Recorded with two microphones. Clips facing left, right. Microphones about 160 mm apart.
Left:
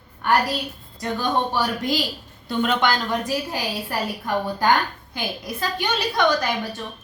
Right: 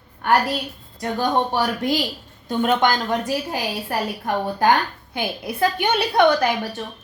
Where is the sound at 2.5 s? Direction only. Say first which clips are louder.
Right 2 dB; 45° right (ahead or behind).